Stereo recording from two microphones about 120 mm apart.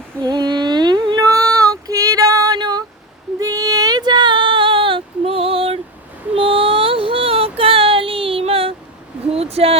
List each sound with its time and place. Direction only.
0.2 s child singing: 35° right (ahead or behind)
3.4 s female singing: 30° right (ahead or behind); by 5.8 s 50° right (ahead or behind)
6.3 s child singing: 50° right (ahead or behind)
9.3 s a sound: 55° right (ahead or behind)